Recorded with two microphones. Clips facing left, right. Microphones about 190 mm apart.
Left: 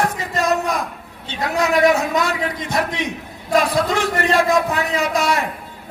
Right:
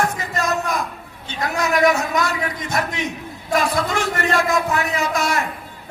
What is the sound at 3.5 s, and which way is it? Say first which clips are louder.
A man's voice: left 3 dB; 35° left (ahead or behind).